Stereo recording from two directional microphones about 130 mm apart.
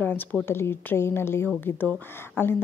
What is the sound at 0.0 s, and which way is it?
A woman's voice, 15° left (ahead or behind).